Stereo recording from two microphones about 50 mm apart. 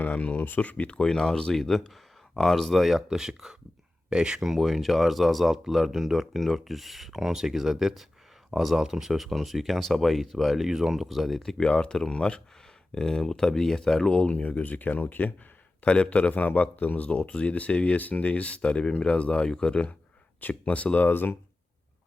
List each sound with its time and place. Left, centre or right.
0.0 s speech: left; by 4.4 s centre
4.4 s speech: centre
10.7 s speech: centre
10.9 s speech: centre
14.2 s speech: left
15.8 s speech: left
21.1 s speech: left